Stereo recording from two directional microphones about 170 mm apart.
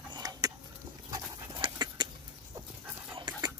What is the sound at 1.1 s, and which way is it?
Dog, 20° right (ahead or behind).